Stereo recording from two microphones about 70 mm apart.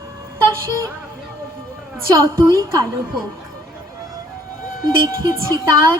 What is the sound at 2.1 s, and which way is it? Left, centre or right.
Speech, right.